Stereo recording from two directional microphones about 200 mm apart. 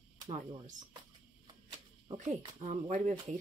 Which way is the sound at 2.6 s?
40° right (ahead or behind).